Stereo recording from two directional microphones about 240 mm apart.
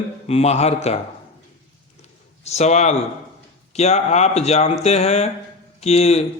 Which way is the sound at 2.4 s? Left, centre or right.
Left.